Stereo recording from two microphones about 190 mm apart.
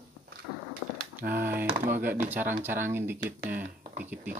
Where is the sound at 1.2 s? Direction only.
50° right (ahead or behind).